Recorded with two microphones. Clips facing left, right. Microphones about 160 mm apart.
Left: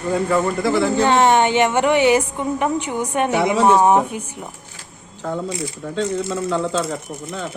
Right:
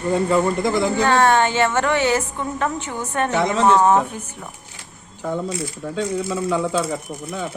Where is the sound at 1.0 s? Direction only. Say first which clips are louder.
Left 1 dB; 20° left (ahead or behind).